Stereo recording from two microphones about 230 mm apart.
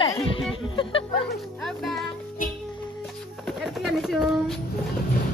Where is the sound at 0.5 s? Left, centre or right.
Left.